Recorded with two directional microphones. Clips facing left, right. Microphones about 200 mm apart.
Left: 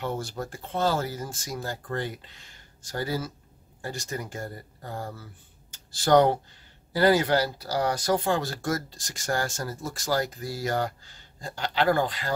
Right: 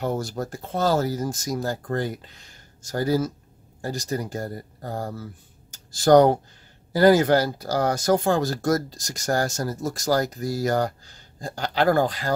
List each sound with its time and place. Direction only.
0.0 s speech: 40° right (ahead or behind)